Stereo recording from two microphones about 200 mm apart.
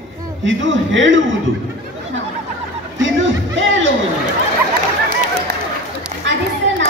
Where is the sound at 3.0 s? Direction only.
70° right (ahead or behind).